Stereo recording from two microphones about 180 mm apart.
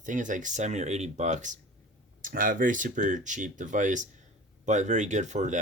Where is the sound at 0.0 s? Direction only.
45° right (ahead or behind).